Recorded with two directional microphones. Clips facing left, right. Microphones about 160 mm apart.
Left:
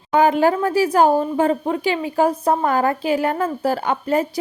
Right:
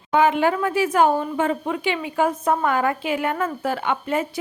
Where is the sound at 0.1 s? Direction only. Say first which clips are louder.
Left 3 dB; 40° left (ahead or behind).